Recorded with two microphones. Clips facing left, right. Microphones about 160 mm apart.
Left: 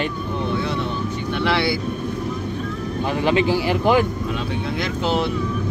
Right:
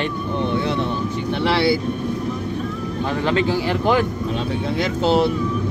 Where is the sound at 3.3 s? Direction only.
10° left (ahead or behind).